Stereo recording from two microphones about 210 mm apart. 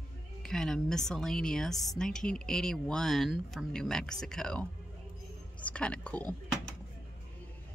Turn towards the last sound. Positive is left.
turn(degrees=5)  # may be behind; listen again after turning